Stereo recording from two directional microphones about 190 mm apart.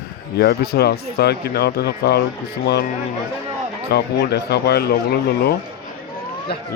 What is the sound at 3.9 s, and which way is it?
Speech, 60° left (ahead or behind).